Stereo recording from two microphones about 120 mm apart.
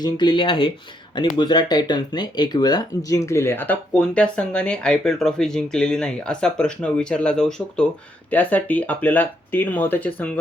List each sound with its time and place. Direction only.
0.0 s speech: 40° left (ahead or behind); by 10.1 s 15° left (ahead or behind)